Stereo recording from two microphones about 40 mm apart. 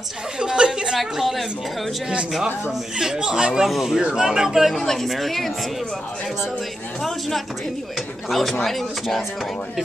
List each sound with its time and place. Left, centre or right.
0.4 s a sound: centre
0.9 s a sound: centre
2.3 s speech: centre
3.6 s speech: centre
4.7 s speech: centre
7.0 s speech: centre